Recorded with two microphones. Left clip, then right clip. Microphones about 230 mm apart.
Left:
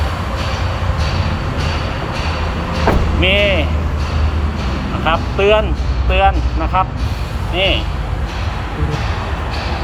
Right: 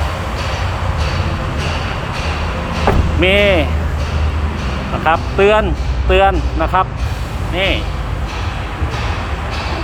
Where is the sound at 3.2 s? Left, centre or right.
Right.